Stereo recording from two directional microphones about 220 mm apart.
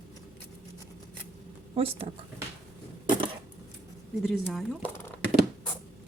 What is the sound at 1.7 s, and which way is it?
Speech, 25° right (ahead or behind).